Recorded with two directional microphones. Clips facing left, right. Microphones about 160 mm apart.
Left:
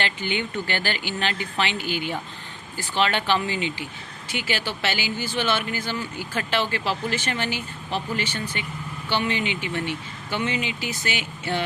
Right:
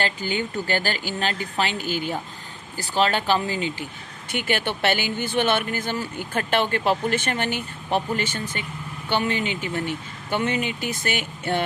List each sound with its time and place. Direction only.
0.0 s speech: 40° right (ahead or behind)
4.3 s speech: 55° right (ahead or behind)